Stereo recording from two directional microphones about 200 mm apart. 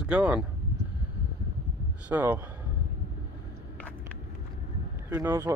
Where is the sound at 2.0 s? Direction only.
10° right (ahead or behind).